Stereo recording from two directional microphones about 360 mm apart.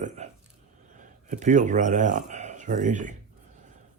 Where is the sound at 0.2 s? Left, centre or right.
Centre.